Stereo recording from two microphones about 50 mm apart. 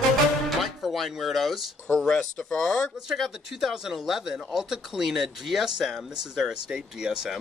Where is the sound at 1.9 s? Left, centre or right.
Centre.